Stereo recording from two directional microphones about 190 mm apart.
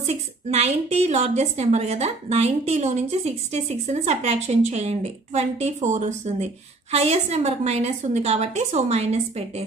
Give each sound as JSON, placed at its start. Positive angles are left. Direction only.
{"t": 0.0, "sound": "a woman's voice", "side_deg": -35}